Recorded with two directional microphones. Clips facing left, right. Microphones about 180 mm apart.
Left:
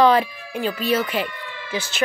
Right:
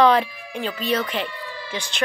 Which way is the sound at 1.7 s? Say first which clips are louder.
Left 4 dB; 5° left (ahead or behind).